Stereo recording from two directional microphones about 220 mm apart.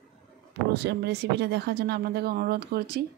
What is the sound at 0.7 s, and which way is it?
Speech, 45° right (ahead or behind).